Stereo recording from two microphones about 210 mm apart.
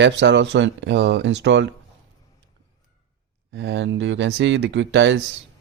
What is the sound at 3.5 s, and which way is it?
Speech, 55° right (ahead or behind).